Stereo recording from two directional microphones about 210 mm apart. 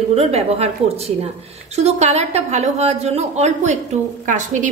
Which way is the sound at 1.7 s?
30° right (ahead or behind).